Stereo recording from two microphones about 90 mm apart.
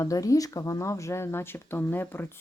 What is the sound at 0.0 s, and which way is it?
Speech, 40° left (ahead or behind).